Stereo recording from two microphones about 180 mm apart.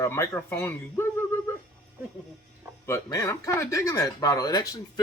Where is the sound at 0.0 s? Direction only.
15° left (ahead or behind).